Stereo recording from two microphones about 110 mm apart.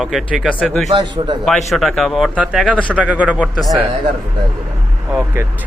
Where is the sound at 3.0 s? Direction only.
10° right (ahead or behind).